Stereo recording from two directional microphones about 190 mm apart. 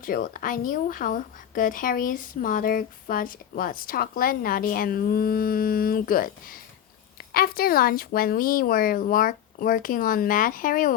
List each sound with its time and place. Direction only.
0.0 s a woman's voice: 45° left (ahead or behind)